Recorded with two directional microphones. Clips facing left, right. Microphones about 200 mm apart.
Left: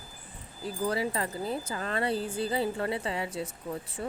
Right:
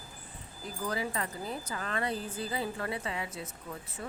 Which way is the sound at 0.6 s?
30° left (ahead or behind).